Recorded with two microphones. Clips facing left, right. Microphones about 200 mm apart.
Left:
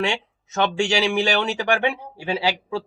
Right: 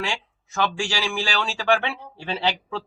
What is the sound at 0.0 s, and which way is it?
Speech, 25° left (ahead or behind).